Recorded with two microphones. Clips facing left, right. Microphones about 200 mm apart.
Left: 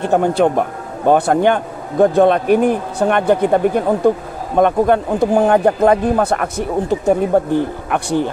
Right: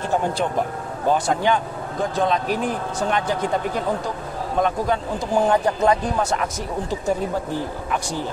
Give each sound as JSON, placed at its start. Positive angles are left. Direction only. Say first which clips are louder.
{"t": 0.0, "sound": "speech", "louder": "left 8 dB", "side_deg": 65}